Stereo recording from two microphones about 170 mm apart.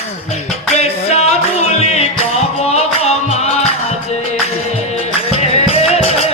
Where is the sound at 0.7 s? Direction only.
40° left (ahead or behind).